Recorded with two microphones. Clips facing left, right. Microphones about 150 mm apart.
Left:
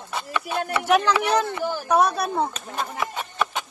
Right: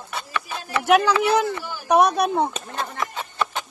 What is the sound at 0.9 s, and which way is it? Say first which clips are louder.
Speech: right 3 dB; 10° right (ahead or behind).